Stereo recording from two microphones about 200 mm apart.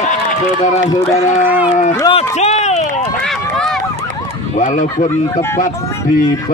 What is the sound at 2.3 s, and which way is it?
Run, 35° left (ahead or behind).